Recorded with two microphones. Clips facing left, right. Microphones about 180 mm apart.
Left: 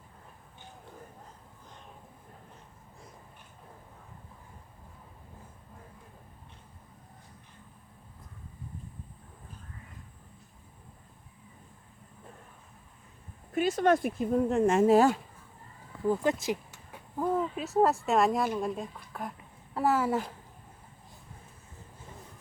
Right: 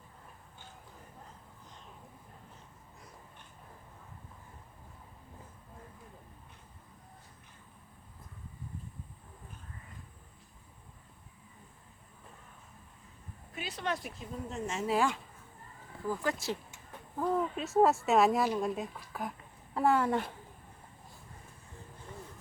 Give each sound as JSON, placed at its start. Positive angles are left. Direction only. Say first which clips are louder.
{"t": 13.5, "sound": "speech", "louder": "left 12 dB", "side_deg": 45}
{"t": 16.0, "sound": "a woman's voice", "louder": "left 6 dB", "side_deg": 20}